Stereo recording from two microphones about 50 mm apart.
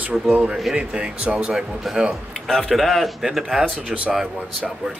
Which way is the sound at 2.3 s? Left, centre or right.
Centre.